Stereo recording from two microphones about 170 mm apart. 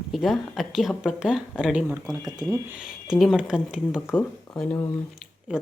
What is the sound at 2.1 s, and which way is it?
Speech, 20° right (ahead or behind).